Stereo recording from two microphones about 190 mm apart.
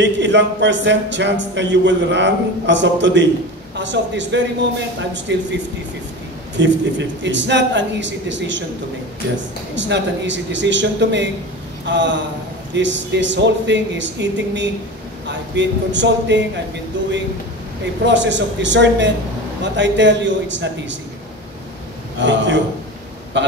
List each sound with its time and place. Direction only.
0.0 s speech: 70° right (ahead or behind)
9.8 s speech: 70° right (ahead or behind)
18.0 s speech: 70° right (ahead or behind)
22.2 s a man's voice: 70° right (ahead or behind)